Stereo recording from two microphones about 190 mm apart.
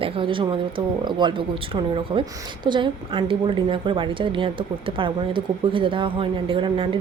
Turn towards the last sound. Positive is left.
turn(degrees=-25)  # may be behind; listen again after turning